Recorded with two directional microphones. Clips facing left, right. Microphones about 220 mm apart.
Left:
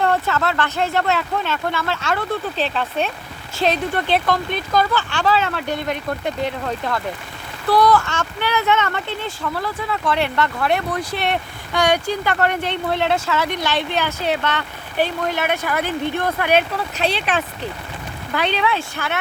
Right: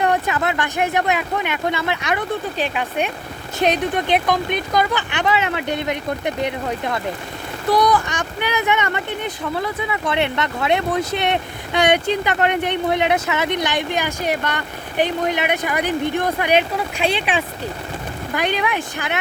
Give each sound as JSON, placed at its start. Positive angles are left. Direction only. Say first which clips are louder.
{"t": 0.0, "sound": "speech", "louder": "even", "side_deg": -15}
{"t": 18.3, "sound": "speech", "louder": "left 1 dB", "side_deg": -15}